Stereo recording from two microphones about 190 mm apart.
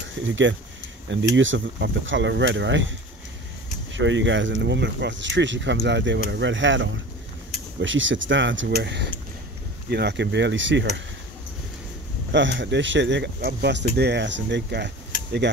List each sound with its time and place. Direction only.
0.0 s speech: 85° right
3.9 s speech: 75° right (ahead or behind)
12.3 s speech: 70° right (ahead or behind)